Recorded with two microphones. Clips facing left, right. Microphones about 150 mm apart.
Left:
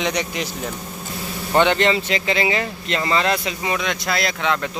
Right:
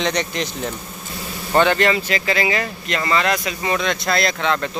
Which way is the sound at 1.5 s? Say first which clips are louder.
Right 1 dB; 20° left (ahead or behind).